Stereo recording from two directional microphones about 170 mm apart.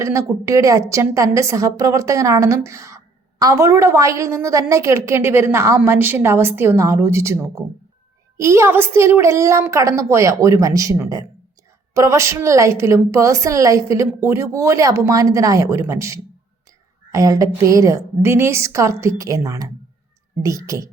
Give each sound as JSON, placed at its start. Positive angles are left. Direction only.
{"t": 0.0, "sound": "a woman's voice", "side_deg": -15}